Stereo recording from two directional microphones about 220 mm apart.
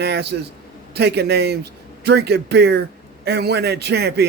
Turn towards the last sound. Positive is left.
turn(degrees=-50)  # may be behind; listen again after turning